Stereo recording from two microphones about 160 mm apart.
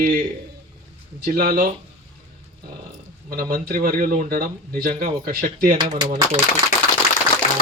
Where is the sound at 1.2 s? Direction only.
65° right (ahead or behind).